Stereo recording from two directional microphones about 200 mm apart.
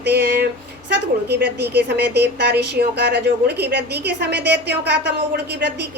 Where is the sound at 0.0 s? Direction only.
55° right (ahead or behind).